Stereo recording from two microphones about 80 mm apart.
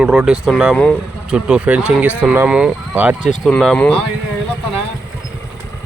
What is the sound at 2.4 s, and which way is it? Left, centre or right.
Speech, centre.